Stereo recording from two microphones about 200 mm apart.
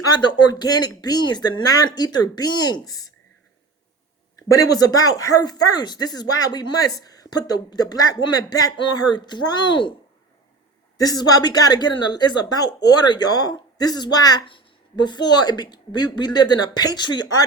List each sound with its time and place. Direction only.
0.0 s a woman's voice: 20° left (ahead or behind)
4.4 s a woman's voice: 20° left (ahead or behind)
10.9 s a woman's voice: 20° left (ahead or behind)